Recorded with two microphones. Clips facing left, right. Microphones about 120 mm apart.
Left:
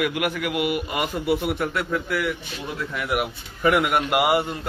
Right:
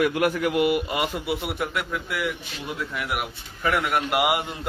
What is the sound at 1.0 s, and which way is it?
A man's voice, 5° right (ahead or behind).